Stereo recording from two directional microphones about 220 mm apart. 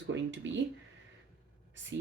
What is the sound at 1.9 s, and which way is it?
Speech, 55° right (ahead or behind).